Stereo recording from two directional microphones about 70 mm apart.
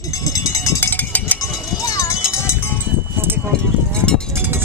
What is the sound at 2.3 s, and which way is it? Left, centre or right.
Music, left.